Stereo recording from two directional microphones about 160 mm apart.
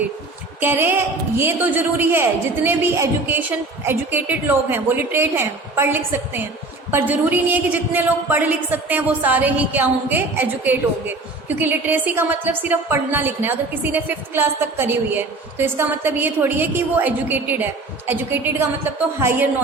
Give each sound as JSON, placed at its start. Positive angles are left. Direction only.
{"t": 0.6, "sound": "a woman's voice", "side_deg": -15}